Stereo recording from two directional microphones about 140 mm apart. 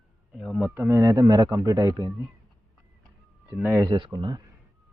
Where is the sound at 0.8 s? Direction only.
20° right (ahead or behind).